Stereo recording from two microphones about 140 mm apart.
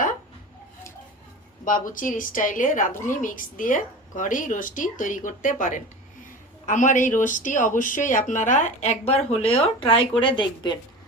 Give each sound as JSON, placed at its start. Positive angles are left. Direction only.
{"t": 1.6, "sound": "a woman's voice", "side_deg": 70}